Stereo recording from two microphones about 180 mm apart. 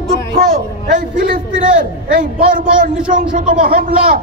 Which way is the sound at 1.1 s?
50° right (ahead or behind).